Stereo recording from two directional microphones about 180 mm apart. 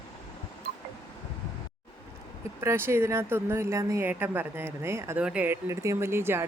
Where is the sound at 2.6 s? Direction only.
15° right (ahead or behind).